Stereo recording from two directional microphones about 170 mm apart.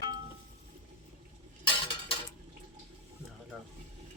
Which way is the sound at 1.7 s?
30° left (ahead or behind).